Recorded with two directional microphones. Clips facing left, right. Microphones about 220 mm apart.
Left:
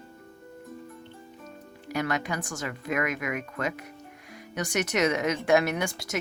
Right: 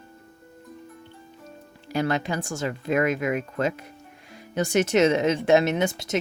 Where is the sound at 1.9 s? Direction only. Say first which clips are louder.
Right 4 dB; 30° right (ahead or behind).